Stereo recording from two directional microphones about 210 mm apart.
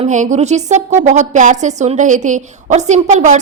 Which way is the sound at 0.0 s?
35° right (ahead or behind).